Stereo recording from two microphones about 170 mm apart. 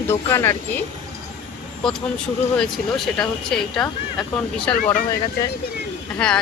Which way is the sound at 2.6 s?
Centre (ahead or behind).